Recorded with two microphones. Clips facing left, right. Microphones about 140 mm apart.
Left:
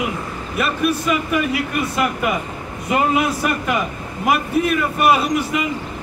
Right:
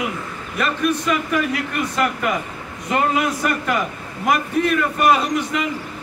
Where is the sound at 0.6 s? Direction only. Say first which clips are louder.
Left 1 dB; 10° left (ahead or behind).